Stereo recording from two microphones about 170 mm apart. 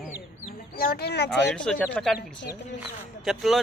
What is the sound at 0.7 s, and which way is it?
Speech, 65° left (ahead or behind).